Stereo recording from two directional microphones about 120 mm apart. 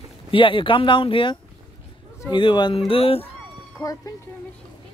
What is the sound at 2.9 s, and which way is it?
Speech, 50° left (ahead or behind).